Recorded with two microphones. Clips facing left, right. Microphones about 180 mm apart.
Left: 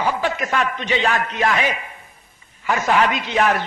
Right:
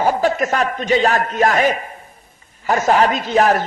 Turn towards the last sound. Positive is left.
turn(degrees=-40)  # may be behind; listen again after turning